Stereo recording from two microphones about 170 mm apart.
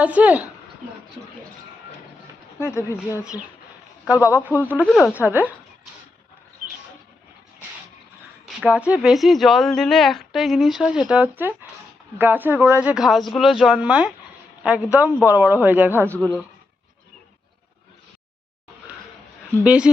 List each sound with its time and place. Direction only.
0.0 s a man's voice: 10° right (ahead or behind)
2.6 s speech: 15° left (ahead or behind)
4.3 s a man's voice: 10° right (ahead or behind)
5.2 s a man's voice: 10° right (ahead or behind)
8.4 s a man's voice: 5° right (ahead or behind)
16.1 s speech: 10° left (ahead or behind)
19.6 s speech: 5° right (ahead or behind)